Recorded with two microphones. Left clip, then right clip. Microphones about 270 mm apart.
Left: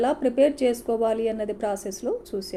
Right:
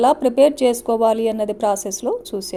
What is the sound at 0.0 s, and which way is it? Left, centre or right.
A woman's voice, right.